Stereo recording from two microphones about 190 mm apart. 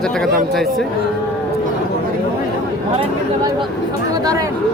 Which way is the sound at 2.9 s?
20° right (ahead or behind).